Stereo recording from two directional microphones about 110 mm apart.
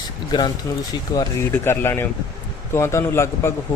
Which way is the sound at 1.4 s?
20° left (ahead or behind).